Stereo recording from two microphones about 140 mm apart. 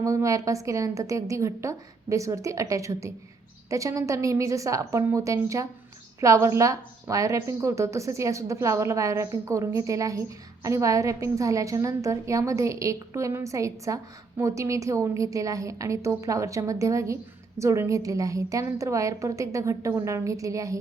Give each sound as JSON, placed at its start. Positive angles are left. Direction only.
{"t": 0.0, "sound": "a woman's voice", "side_deg": -20}